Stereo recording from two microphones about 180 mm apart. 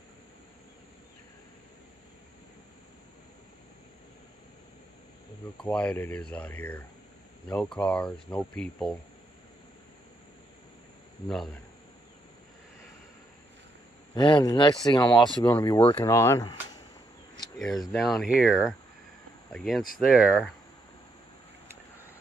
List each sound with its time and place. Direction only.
5.6 s speech: 5° left (ahead or behind)
11.2 s speech: centre (ahead or behind)
14.1 s speech: 25° left (ahead or behind)
15.0 s speech: 5° left (ahead or behind)
15.6 s speech: 30° left (ahead or behind)
16.1 s speech: 15° left (ahead or behind)
17.9 s speech: centre (ahead or behind)